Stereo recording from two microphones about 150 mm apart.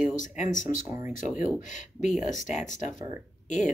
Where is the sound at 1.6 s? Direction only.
55° left (ahead or behind).